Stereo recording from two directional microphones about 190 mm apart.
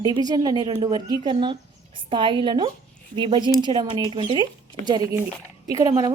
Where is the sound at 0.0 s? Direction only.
20° right (ahead or behind).